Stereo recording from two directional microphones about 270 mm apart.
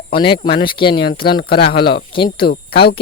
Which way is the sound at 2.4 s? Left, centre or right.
Left.